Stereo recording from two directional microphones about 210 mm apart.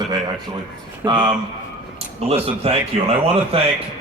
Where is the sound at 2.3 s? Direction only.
30° right (ahead or behind).